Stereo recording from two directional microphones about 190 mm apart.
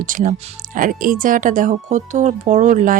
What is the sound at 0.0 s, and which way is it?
Speech, 45° right (ahead or behind).